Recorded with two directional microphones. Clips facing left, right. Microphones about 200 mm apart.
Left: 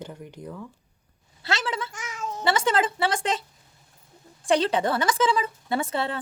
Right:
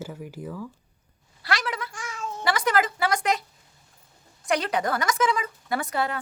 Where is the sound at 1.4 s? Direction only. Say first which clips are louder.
Left 1 dB; 25° left (ahead or behind).